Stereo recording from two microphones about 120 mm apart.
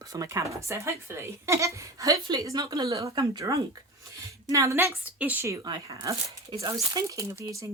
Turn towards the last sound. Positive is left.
turn(degrees=-25)  # may be behind; listen again after turning